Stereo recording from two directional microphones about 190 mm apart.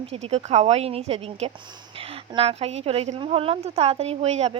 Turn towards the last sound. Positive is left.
turn(degrees=-35)  # may be behind; listen again after turning